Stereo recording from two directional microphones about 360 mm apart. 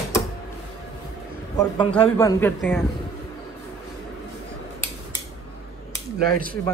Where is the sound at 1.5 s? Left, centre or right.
Centre.